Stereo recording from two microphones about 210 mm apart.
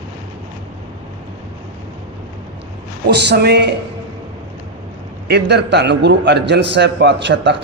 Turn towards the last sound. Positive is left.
turn(degrees=-55)  # may be behind; listen again after turning